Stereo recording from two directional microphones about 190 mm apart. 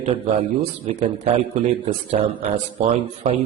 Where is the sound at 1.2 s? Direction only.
30° right (ahead or behind).